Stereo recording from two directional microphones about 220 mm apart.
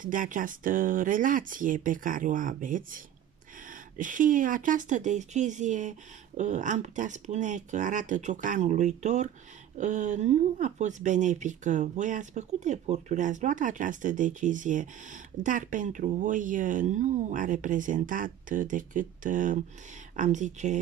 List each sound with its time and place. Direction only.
0.0 s speech: 35° right (ahead or behind)